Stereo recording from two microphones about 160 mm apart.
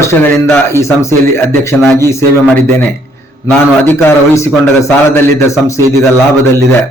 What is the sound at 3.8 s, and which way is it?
A man's voice, 15° left (ahead or behind).